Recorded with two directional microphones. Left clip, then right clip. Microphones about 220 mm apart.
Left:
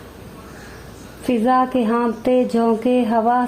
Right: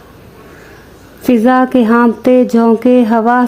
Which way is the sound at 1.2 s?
45° right (ahead or behind).